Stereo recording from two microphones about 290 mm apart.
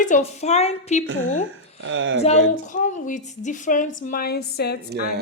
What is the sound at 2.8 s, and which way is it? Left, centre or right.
A woman's voice, left.